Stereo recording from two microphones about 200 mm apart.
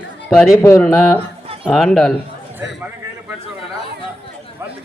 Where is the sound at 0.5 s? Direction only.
15° left (ahead or behind).